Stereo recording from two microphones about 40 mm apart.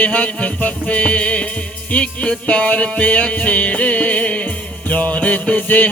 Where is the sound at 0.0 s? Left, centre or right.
Left.